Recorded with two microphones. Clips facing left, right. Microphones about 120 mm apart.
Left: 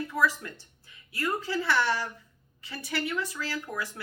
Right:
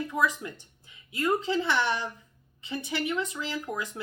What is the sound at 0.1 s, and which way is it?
Speech, 20° right (ahead or behind).